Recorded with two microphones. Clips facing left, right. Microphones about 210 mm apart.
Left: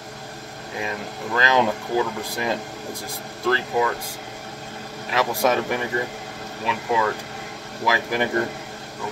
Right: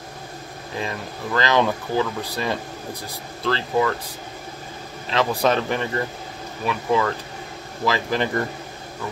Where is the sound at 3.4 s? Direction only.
15° left (ahead or behind).